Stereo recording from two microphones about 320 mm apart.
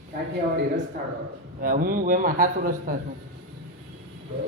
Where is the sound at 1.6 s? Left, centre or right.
Right.